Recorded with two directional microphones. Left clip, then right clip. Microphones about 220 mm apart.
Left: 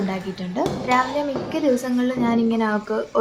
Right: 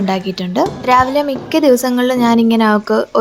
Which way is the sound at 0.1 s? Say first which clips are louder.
Right 10 dB; 45° right (ahead or behind).